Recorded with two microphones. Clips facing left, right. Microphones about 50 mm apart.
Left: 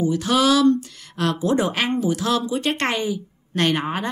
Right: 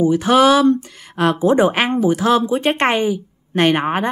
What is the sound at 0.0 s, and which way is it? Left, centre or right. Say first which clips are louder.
A woman's voice: right 6 dB; right.